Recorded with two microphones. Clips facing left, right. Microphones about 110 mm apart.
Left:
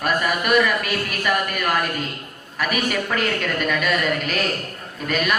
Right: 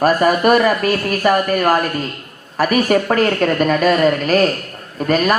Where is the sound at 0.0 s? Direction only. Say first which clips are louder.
Right 9 dB; 40° right (ahead or behind).